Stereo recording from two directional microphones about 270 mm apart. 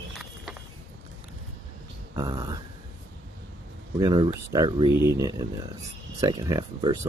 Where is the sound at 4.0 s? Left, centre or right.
Centre.